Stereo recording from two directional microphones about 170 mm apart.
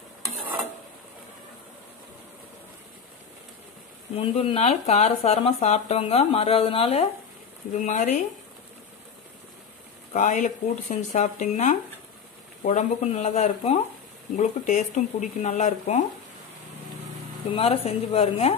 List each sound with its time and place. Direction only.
4.1 s speech: 35° left (ahead or behind)
7.7 s speech: 45° left (ahead or behind)
10.1 s speech: 45° left (ahead or behind)
17.5 s speech: 35° left (ahead or behind)